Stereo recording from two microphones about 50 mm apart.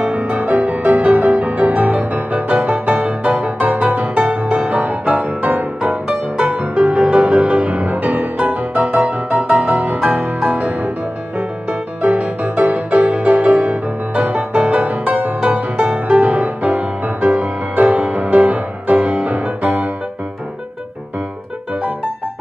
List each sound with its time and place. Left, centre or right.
0.0 s music: right
8.8 s music: right
12.0 s music: right